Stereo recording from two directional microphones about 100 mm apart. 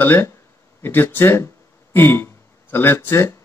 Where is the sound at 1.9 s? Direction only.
25° left (ahead or behind).